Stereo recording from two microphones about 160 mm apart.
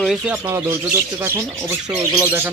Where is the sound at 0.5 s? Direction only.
15° right (ahead or behind).